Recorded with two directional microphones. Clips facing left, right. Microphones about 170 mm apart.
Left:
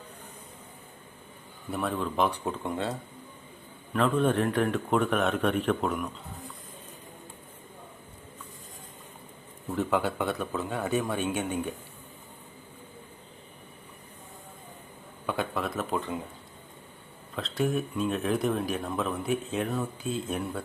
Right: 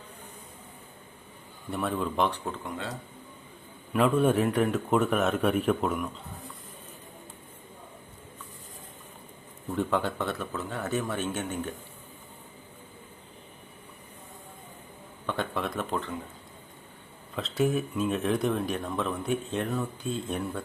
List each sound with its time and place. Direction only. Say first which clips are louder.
1.7 s speech: even; centre (ahead or behind)
3.9 s speech: right 2 dB; 10° right (ahead or behind)
9.6 s speech: left 1 dB; 5° left (ahead or behind)
15.3 s speech: left 1 dB; 5° left (ahead or behind)
17.3 s speech: right 2 dB; centre (ahead or behind)